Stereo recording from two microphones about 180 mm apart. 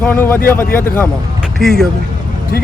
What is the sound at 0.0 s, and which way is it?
Speech, 10° left (ahead or behind).